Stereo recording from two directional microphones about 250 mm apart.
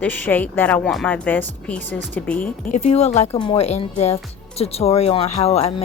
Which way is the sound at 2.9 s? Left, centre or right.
Left.